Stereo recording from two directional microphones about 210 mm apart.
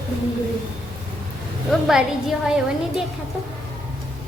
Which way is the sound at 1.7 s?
Centre (ahead or behind).